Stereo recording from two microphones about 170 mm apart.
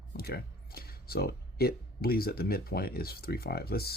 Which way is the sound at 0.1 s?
65° left (ahead or behind).